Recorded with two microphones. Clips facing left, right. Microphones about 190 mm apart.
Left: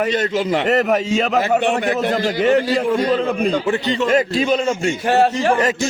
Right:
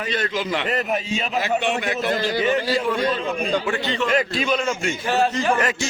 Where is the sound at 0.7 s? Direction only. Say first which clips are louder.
Left 7 dB; 75° left (ahead or behind).